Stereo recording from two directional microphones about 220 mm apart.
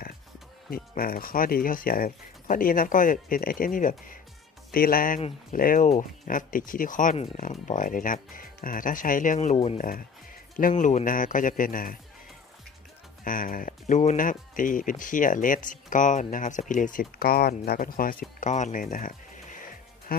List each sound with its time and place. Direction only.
0.7 s speech: 40° left (ahead or behind)
13.2 s speech: 40° left (ahead or behind)